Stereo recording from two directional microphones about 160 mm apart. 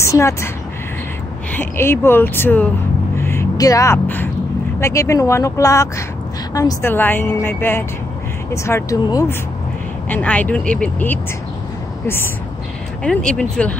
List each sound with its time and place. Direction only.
0.0 s a woman's voice: 20° left (ahead or behind)
1.5 s a woman's voice: 15° left (ahead or behind)
3.2 s a sound: 15° left (ahead or behind)
4.7 s a woman's voice: 15° left (ahead or behind)
13.0 s speech: 5° left (ahead or behind)